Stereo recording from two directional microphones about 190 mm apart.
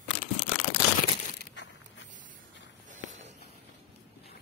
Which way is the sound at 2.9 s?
90° right.